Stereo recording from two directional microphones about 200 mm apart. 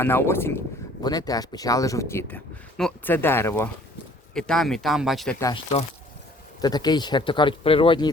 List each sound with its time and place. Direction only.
0.0 s speech: 10° left (ahead or behind)
6.6 s speech: 20° left (ahead or behind)